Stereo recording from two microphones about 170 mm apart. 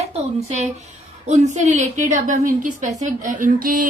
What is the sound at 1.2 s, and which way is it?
A woman's voice, 45° right (ahead or behind).